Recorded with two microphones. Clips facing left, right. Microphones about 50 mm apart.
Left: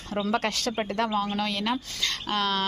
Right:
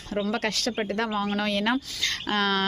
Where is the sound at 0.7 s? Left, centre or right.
Centre.